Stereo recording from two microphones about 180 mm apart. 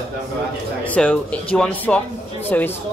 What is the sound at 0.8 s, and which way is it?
A man's voice, 5° left (ahead or behind).